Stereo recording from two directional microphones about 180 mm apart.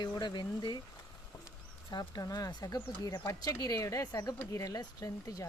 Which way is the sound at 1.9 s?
20° left (ahead or behind).